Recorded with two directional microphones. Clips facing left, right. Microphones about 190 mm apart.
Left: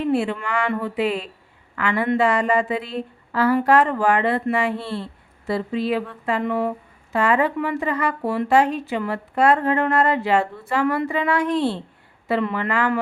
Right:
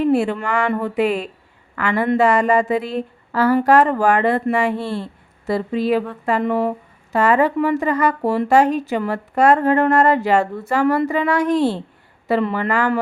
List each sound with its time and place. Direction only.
0.1 s speech: 45° right (ahead or behind)